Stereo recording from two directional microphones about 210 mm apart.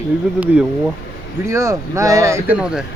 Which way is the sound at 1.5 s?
15° right (ahead or behind).